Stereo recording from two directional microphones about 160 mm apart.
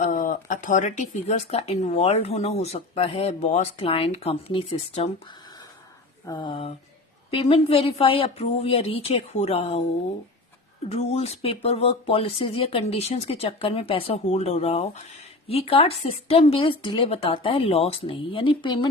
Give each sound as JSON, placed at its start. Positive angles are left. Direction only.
{"t": 0.0, "sound": "speech", "side_deg": 50}
{"t": 6.2, "sound": "speech", "side_deg": 25}
{"t": 10.8, "sound": "speech", "side_deg": 40}